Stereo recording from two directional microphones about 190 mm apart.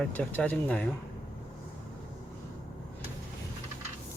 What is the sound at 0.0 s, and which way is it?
Speech, 5° left (ahead or behind).